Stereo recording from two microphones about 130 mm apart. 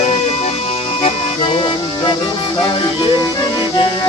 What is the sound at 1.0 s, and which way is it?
Music, 40° left (ahead or behind).